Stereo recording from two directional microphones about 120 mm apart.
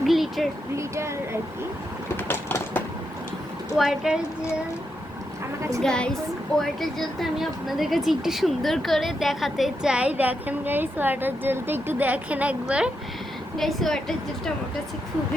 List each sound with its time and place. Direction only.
0.0 s a sound: centre (ahead or behind)
0.8 s speech: 25° right (ahead or behind)
2.1 s train: 15° left (ahead or behind)
3.8 s a woman's voice: 5° right (ahead or behind)
5.8 s a woman's voice: 5° left (ahead or behind); by 12.9 s 10° right (ahead or behind)
13.6 s a woman's voice: centre (ahead or behind)